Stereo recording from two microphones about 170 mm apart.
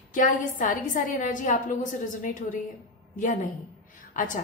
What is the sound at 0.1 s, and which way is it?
A woman's voice, 50° left (ahead or behind).